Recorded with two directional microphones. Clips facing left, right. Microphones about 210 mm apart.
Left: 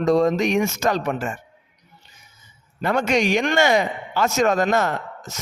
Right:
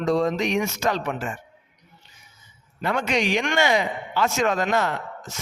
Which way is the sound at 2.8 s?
45° left (ahead or behind).